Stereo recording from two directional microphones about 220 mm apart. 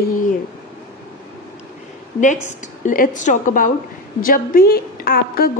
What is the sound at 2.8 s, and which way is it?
A woman's voice, 35° left (ahead or behind).